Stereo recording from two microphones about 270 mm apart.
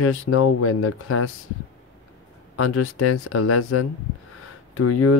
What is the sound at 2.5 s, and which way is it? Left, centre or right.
Speech, left.